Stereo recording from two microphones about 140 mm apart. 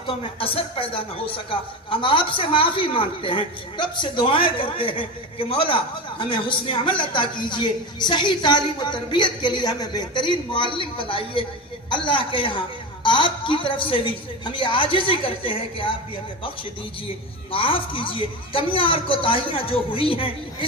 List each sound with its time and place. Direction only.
0.1 s a man's voice: 40° left (ahead or behind)
17.5 s a man's voice: 40° left (ahead or behind)